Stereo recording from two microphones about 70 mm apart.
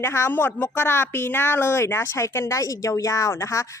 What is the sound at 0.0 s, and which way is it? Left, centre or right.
Speech, left.